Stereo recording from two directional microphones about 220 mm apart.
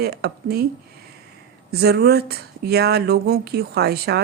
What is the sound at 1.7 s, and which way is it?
Speech, 45° right (ahead or behind).